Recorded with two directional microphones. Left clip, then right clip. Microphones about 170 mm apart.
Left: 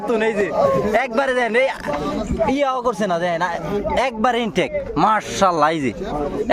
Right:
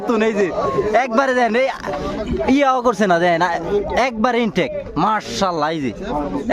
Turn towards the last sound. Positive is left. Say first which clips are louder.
# left 3 dB
turn(degrees=-15)  # may be behind; listen again after turning